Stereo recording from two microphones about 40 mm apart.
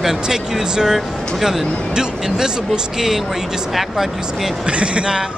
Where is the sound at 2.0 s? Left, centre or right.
Centre.